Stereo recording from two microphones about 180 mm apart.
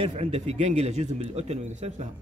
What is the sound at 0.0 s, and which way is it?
Speech, 35° right (ahead or behind).